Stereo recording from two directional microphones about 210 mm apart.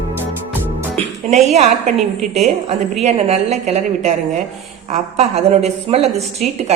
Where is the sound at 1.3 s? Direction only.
30° right (ahead or behind).